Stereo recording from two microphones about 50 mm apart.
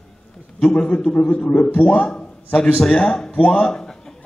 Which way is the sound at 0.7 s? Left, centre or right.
Left.